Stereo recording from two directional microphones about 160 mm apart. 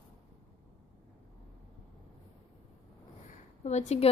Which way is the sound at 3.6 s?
45° left (ahead or behind).